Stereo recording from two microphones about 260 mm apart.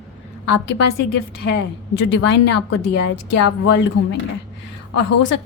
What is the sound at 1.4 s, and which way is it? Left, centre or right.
A woman's voice, left.